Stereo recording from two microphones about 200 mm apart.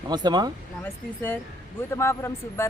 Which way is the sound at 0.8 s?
10° left (ahead or behind).